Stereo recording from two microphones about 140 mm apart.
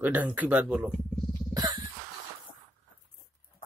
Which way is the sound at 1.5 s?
30° right (ahead or behind).